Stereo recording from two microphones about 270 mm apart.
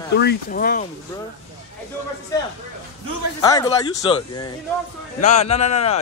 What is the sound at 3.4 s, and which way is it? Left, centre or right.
A man's voice, centre.